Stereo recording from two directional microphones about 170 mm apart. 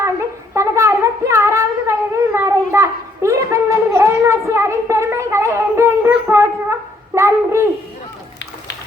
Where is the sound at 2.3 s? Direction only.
15° right (ahead or behind).